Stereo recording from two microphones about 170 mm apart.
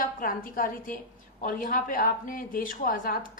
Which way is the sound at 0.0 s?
55° left (ahead or behind).